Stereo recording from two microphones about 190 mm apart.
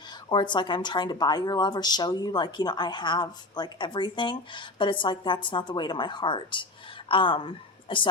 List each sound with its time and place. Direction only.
0.3 s a woman's voice: 25° left (ahead or behind)